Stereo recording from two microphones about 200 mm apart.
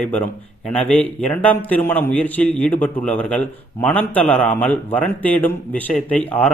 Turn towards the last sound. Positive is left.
turn(degrees=5)  # may be behind; listen again after turning